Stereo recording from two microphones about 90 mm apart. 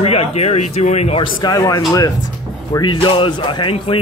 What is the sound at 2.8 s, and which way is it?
Speech, 60° left (ahead or behind).